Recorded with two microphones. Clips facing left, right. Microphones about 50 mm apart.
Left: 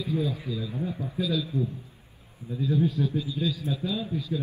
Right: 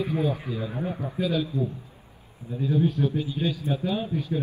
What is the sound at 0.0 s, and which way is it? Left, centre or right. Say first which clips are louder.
Speech: right 3 dB; right.